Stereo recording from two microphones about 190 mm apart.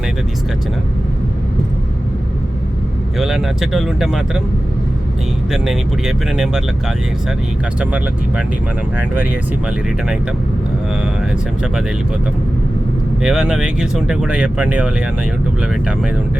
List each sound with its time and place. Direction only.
3.2 s speech: centre (ahead or behind)
5.5 s speech: centre (ahead or behind)
7.8 s speech: 5° right (ahead or behind)
13.2 s speech: 5° right (ahead or behind)